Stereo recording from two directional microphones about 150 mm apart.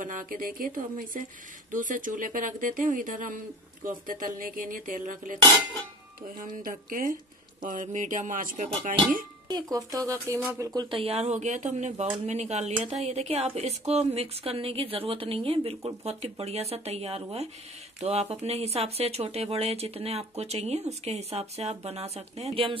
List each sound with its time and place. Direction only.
0.0 s speech: 65° right (ahead or behind)
9.5 s a woman's voice: 25° right (ahead or behind)